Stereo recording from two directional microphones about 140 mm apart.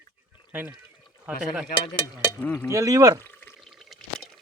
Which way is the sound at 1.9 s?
30° left (ahead or behind).